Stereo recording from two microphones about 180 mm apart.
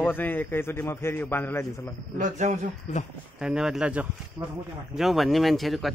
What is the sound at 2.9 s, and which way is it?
Speech, 40° left (ahead or behind).